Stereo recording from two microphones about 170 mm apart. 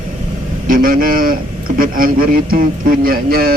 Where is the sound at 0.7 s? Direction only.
55° right (ahead or behind).